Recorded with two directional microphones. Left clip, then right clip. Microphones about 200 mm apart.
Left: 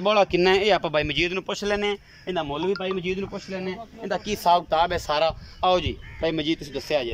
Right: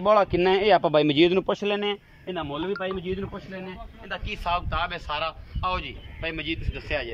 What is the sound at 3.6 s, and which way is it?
A man's voice, 30° left (ahead or behind).